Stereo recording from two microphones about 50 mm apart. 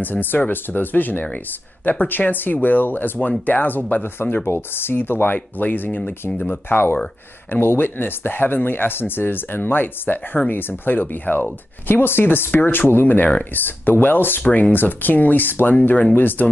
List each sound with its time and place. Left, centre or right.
0.0 s speech: left